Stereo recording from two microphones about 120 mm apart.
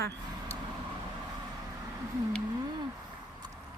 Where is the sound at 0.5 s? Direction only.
25° right (ahead or behind).